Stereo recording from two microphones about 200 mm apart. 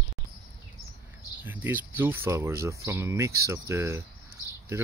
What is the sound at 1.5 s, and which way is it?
Speech, 10° right (ahead or behind).